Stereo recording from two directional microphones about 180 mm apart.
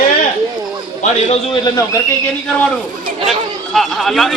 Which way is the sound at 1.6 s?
20° left (ahead or behind).